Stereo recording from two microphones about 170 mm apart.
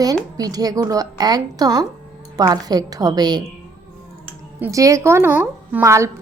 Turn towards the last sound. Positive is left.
turn(degrees=-15)  # may be behind; listen again after turning